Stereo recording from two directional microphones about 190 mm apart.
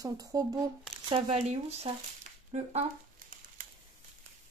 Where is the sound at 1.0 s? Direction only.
30° right (ahead or behind).